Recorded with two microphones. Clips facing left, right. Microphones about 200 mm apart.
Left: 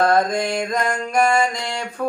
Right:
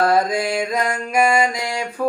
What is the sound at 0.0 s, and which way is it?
Mantra, 5° right (ahead or behind).